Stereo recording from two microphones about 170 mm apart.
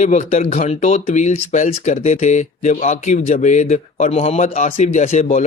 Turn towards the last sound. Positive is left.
turn(degrees=45)  # may be behind; listen again after turning